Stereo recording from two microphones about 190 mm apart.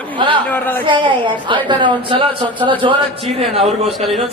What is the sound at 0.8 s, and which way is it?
A woman's voice, 25° right (ahead or behind).